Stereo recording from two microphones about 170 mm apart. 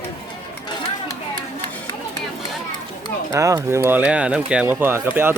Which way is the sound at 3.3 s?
20° right (ahead or behind).